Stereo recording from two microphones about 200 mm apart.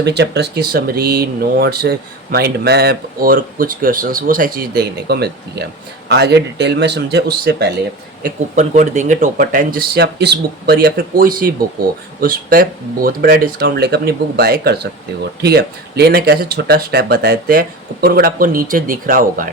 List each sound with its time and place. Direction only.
0.0 s speech: 55° right (ahead or behind)
8.2 s speech: 40° right (ahead or behind)